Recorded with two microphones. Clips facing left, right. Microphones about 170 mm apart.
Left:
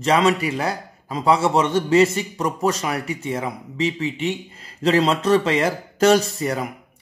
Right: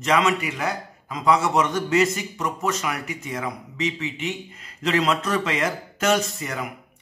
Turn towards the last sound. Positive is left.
turn(degrees=35)  # may be behind; listen again after turning